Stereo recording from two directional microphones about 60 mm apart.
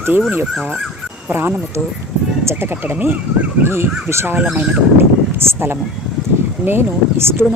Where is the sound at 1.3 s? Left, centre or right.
Right.